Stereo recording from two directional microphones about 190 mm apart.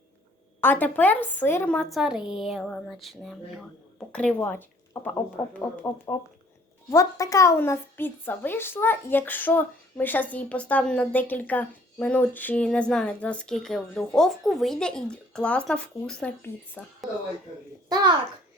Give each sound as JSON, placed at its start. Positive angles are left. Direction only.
{"t": 0.6, "sound": "a woman's voice", "side_deg": 10}
{"t": 17.8, "sound": "babbling", "side_deg": -20}